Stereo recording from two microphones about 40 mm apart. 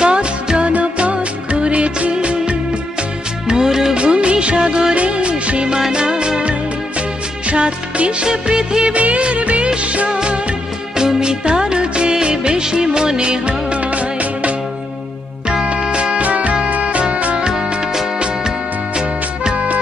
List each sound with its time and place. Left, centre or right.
0.0 s music: right
0.7 s music of bollywood: right
2.1 s music: right
3.9 s music of bollywood: right
4.9 s music: right
7.4 s music of bollywood: right
8.9 s music of bollywood: right
9.8 s music: right
15.4 s music: right
18.9 s music: right